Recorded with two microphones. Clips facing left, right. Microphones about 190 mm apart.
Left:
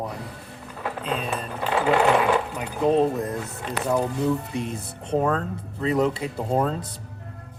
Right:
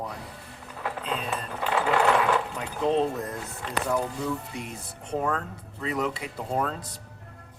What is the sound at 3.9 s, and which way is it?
Speech, 20° left (ahead or behind).